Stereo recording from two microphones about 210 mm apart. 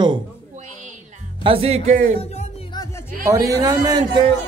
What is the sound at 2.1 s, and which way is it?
Music, 25° left (ahead or behind).